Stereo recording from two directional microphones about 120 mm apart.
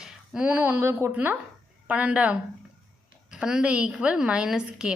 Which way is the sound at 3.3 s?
5° right (ahead or behind).